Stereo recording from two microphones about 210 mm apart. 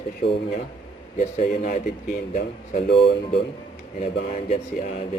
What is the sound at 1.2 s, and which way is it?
A man's voice, 40° left (ahead or behind).